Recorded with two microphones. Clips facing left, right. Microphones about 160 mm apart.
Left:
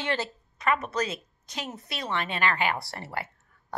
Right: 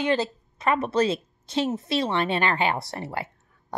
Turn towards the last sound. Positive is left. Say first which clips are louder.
# right 4 dB
turn(degrees=-20)  # may be behind; listen again after turning